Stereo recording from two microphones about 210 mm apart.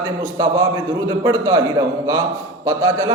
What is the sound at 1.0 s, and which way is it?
Speech, 15° right (ahead or behind).